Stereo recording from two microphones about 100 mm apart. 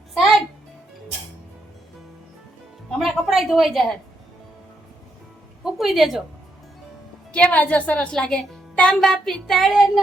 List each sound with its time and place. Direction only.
3.0 s a sound: centre (ahead or behind)
5.6 s speech: centre (ahead or behind)
7.3 s a woman's voice: 15° left (ahead or behind); by 10.0 s centre (ahead or behind)